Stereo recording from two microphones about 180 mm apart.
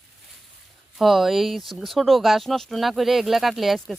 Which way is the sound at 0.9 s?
Centre (ahead or behind).